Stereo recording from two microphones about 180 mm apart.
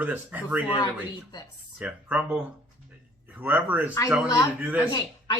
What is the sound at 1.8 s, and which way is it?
Speech, 5° right (ahead or behind).